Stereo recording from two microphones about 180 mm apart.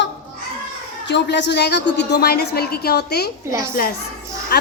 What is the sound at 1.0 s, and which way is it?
A woman's voice, 75° left (ahead or behind).